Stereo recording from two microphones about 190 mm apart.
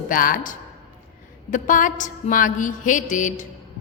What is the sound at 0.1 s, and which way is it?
Mantra, 45° left (ahead or behind).